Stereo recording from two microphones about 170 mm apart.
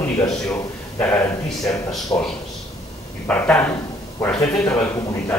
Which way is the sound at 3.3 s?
10° left (ahead or behind).